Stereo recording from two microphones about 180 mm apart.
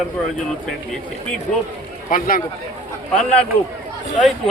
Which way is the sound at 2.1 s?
50° left (ahead or behind).